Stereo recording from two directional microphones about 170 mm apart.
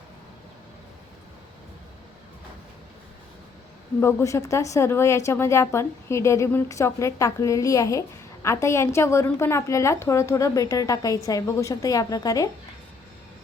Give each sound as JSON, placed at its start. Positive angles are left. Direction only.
{"t": 4.0, "sound": "a woman's voice", "side_deg": 20}